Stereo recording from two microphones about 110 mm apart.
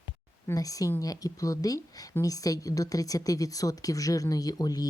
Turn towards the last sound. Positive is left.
turn(degrees=35)  # may be behind; listen again after turning